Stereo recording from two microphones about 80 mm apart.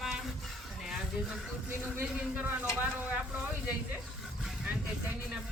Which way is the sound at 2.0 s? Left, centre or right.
Centre.